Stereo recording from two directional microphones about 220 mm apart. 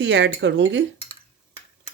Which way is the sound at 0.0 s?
55° right (ahead or behind).